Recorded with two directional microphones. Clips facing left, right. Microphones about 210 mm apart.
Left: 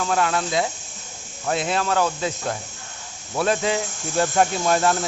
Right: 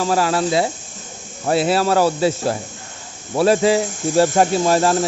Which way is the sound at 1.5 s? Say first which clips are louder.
Right 8 dB; 5° right (ahead or behind).